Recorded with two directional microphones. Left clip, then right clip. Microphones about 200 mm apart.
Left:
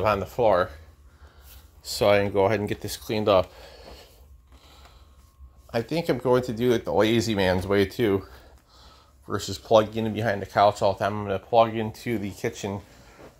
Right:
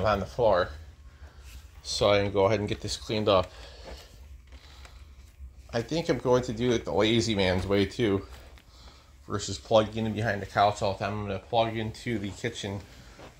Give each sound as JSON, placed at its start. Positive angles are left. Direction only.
{"t": 0.0, "sound": "speech", "side_deg": 35}
{"t": 1.8, "sound": "speech", "side_deg": 30}
{"t": 5.7, "sound": "speech", "side_deg": 25}